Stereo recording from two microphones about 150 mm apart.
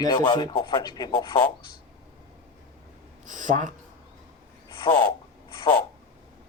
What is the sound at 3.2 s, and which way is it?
Speech, 55° right (ahead or behind).